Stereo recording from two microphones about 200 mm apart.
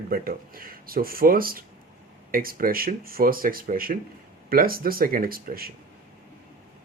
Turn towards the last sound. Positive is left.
turn(degrees=-45)  # may be behind; listen again after turning